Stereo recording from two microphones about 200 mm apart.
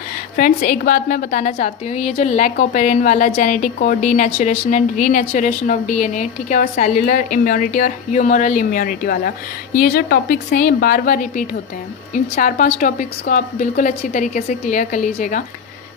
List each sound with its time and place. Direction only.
0.3 s a woman's voice: 45° left (ahead or behind)